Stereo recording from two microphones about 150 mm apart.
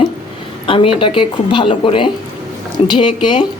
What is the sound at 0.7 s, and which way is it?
Speech, 35° left (ahead or behind).